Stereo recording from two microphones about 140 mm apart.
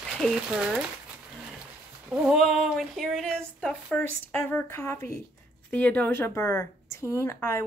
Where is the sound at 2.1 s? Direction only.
5° right (ahead or behind).